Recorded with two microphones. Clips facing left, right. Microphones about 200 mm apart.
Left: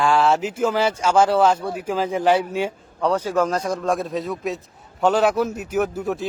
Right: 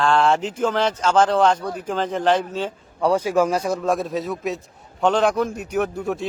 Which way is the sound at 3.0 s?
10° right (ahead or behind).